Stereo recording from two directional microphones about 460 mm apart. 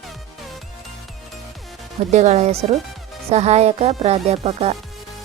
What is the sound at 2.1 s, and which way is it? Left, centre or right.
Music, centre.